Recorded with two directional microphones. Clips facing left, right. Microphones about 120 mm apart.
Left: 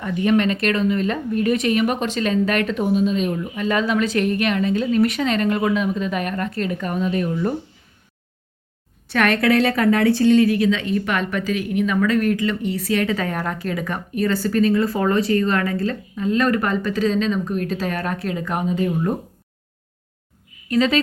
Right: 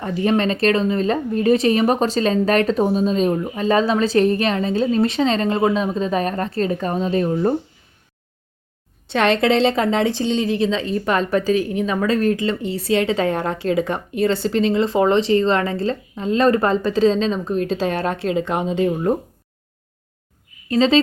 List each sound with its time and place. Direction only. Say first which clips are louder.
0.0 s speech: even; 35° right (ahead or behind)
9.0 s a woman's voice: right 1 dB; 25° right (ahead or behind)
20.7 s a woman's voice: right 3 dB; 30° right (ahead or behind)